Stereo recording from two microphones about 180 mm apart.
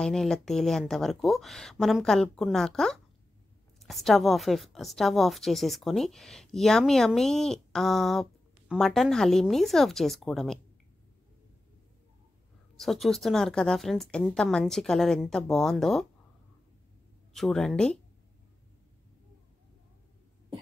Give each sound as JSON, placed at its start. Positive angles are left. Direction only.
{"t": 0.0, "sound": "a woman's voice", "side_deg": 0}
{"t": 12.7, "sound": "a woman's voice", "side_deg": 0}
{"t": 17.3, "sound": "a woman's voice", "side_deg": 0}